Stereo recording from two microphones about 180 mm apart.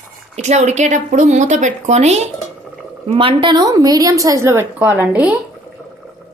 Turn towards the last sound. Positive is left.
turn(degrees=-5)  # may be behind; listen again after turning